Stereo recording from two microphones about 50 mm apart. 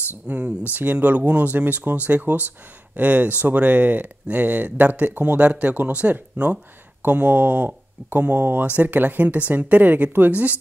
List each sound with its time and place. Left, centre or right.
0.3 s speech: right